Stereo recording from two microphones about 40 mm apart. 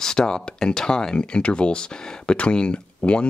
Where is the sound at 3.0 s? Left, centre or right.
Left.